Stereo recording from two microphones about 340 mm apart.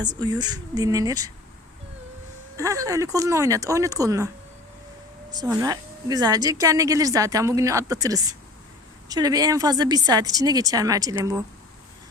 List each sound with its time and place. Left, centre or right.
0.0 s speech: centre
2.6 s speech: centre
5.3 s speech: centre